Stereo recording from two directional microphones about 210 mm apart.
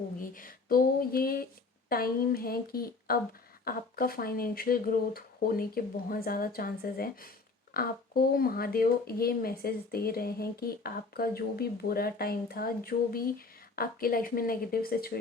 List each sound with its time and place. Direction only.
0.2 s speech: 40° left (ahead or behind)